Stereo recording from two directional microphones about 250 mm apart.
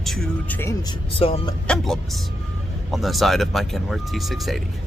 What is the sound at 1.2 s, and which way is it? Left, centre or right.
Speech, left.